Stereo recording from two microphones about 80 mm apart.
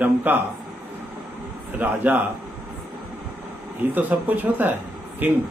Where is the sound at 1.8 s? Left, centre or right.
Right.